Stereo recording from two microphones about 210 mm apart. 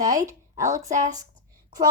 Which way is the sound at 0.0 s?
15° right (ahead or behind).